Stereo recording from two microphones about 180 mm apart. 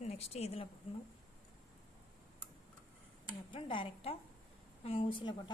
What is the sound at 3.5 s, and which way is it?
A woman's voice, 30° left (ahead or behind).